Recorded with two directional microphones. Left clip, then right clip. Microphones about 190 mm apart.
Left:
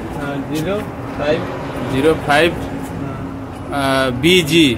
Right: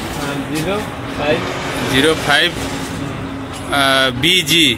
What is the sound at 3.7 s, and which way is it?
Speech, 10° left (ahead or behind).